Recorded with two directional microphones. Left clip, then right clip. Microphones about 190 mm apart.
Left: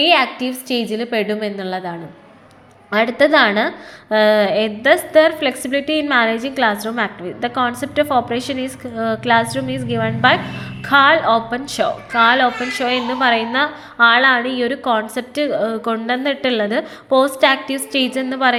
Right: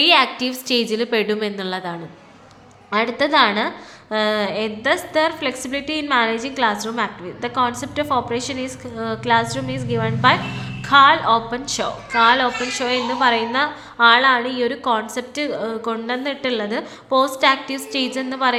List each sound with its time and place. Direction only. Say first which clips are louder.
0.0 s a woman's voice: left 1 dB; centre (ahead or behind)
2.9 s a woman's voice: left 4 dB; 15° left (ahead or behind)